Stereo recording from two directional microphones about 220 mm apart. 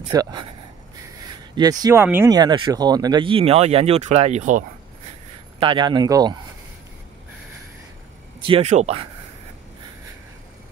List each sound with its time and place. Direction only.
0.1 s speech: 20° right (ahead or behind)
1.5 s speech: 15° right (ahead or behind); by 4.6 s 35° right (ahead or behind)
5.6 s speech: 20° right (ahead or behind)
8.5 s speech: 30° right (ahead or behind)